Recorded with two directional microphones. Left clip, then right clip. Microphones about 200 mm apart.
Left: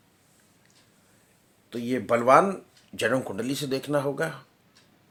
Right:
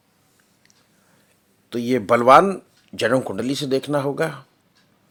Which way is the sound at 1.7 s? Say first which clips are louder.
Right 7 dB; 50° right (ahead or behind).